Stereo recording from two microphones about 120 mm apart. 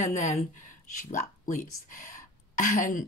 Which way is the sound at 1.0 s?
90° left.